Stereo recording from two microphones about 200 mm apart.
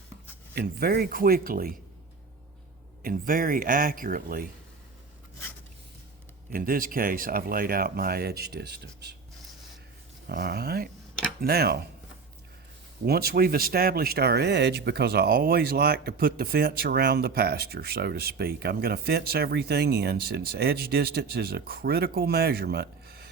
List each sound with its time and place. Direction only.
0.5 s speech: 50° right (ahead or behind)
3.0 s speech: 45° right (ahead or behind)
6.5 s speech: 45° right (ahead or behind)
10.2 s speech: 50° right (ahead or behind)
13.1 s speech: 50° right (ahead or behind)